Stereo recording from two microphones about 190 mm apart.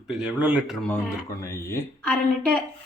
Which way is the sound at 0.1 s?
5° right (ahead or behind).